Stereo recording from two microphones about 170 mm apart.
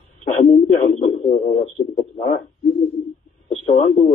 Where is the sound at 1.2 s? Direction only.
40° left (ahead or behind).